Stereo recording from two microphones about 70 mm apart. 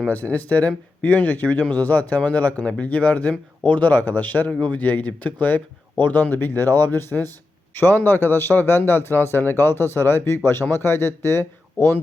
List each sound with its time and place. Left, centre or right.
0.1 s a man's voice: left